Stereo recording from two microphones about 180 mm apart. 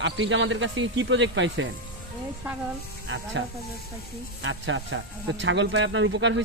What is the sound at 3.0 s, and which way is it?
Speech, 90° right.